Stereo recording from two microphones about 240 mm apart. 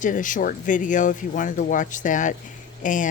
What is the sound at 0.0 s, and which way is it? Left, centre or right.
Speech, left.